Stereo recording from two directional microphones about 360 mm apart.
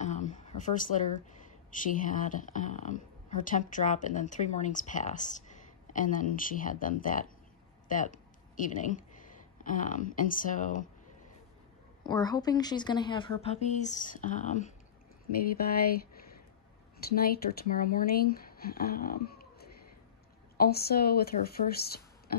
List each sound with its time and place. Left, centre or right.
0.0 s a sound: centre
1.7 s a woman's voice: left
12.0 s a woman's voice: centre
17.0 s a woman's voice: left